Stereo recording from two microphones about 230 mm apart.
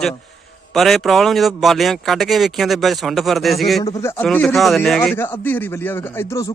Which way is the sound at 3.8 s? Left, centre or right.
Centre.